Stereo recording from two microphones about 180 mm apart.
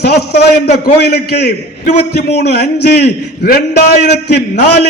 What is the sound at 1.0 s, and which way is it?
A man's voice, 65° left (ahead or behind).